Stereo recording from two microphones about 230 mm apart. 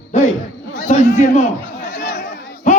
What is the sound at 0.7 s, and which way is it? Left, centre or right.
Chatter, left.